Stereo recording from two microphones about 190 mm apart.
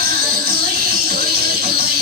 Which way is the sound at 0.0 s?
55° right (ahead or behind).